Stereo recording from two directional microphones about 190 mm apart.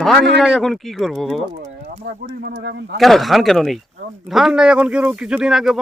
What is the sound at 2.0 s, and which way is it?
Speech, 55° right (ahead or behind).